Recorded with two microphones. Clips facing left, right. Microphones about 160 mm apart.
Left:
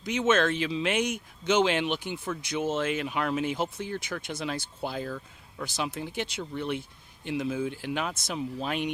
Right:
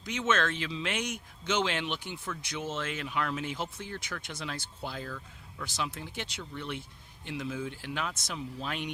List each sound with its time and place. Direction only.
0.0 s speech: 15° left (ahead or behind)
2.2 s speech: 25° left (ahead or behind)
2.6 s speech: 15° left (ahead or behind)
5.1 s speech: 30° left (ahead or behind)
5.7 s speech: 15° left (ahead or behind)